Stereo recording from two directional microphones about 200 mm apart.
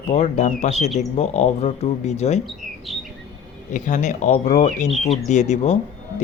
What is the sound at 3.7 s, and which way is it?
Speech, 40° left (ahead or behind).